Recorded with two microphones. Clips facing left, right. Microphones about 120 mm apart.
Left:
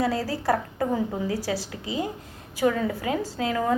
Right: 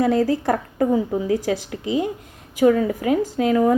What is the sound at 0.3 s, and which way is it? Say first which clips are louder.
A woman's voice: right 4 dB; 20° right (ahead or behind).